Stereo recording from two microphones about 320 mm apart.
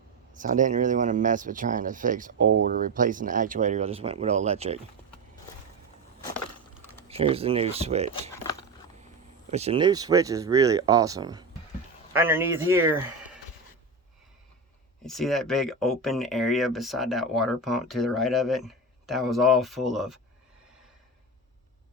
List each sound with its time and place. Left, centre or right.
0.3 s speech: right
7.1 s speech: centre
9.5 s speech: centre
15.0 s speech: centre